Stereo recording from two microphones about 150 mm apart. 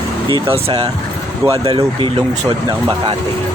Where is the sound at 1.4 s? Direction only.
25° right (ahead or behind).